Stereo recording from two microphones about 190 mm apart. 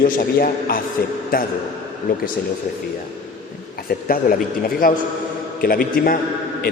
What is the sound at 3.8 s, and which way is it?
A man's voice, 50° left (ahead or behind).